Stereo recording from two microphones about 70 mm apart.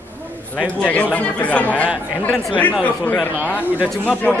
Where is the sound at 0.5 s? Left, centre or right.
Centre.